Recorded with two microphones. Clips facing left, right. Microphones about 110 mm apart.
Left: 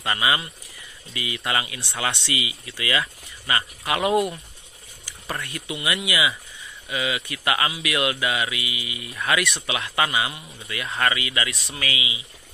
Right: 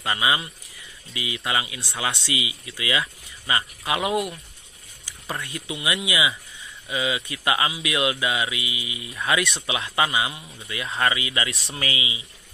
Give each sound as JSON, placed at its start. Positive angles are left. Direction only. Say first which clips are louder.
{"t": 0.0, "sound": "speech", "louder": "even", "side_deg": -15}
{"t": 4.1, "sound": "speech", "louder": "left 4 dB", "side_deg": 0}
{"t": 5.4, "sound": "speech", "louder": "even", "side_deg": -20}